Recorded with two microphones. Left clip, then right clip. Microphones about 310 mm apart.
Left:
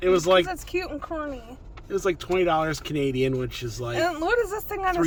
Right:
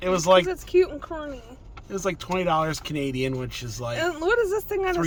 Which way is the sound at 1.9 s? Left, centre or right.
Centre.